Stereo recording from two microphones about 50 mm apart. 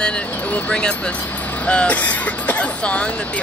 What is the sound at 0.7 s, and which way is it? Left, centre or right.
Speech, centre.